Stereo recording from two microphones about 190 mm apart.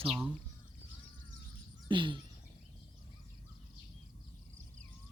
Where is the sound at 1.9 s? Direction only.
25° right (ahead or behind).